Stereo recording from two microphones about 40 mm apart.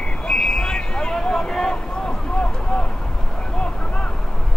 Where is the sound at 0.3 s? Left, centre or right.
Centre.